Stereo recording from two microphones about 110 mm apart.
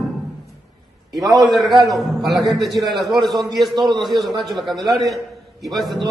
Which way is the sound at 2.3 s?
35° right (ahead or behind).